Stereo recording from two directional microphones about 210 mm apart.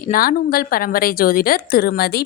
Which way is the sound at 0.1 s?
45° left (ahead or behind).